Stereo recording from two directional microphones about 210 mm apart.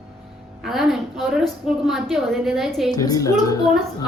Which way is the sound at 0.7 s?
Centre (ahead or behind).